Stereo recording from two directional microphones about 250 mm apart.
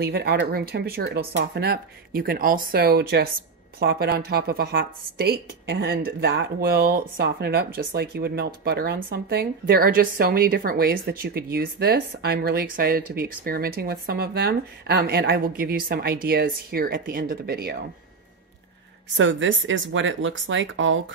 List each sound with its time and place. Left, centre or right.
0.0 s a woman's voice: right
19.1 s speech: right